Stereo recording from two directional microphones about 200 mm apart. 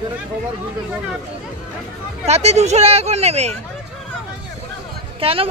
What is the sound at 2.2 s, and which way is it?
Speech, 35° right (ahead or behind).